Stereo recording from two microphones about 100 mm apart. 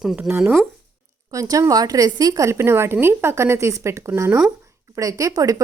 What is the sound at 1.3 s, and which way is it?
A woman's voice, 35° right (ahead or behind).